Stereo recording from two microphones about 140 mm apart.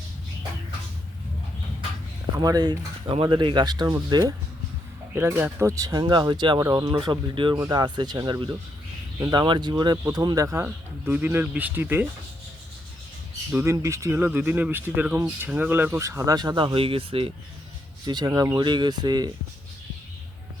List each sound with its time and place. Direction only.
2.3 s speech: 30° right (ahead or behind)
13.6 s speech: 20° right (ahead or behind)
16.7 s speech: 40° right (ahead or behind)
18.0 s speech: 30° right (ahead or behind)